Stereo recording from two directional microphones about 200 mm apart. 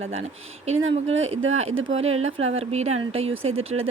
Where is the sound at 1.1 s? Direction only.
80° right.